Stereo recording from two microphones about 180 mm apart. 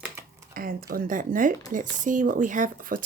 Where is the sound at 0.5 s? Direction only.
55° right (ahead or behind).